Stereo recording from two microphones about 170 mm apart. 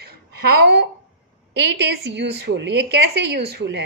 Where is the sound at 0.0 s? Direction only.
70° right (ahead or behind).